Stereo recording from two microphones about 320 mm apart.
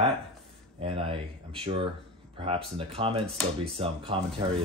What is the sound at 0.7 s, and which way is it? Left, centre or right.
Speech, centre.